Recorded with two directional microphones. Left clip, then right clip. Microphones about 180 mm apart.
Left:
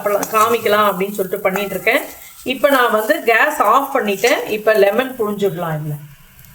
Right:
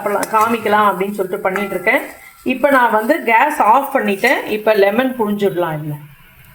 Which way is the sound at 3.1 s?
20° right (ahead or behind).